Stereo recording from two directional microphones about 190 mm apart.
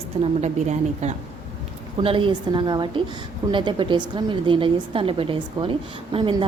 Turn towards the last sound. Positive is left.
turn(degrees=-25)  # may be behind; listen again after turning